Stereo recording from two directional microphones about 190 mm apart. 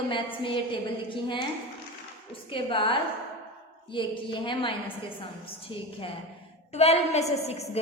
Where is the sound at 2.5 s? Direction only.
25° left (ahead or behind).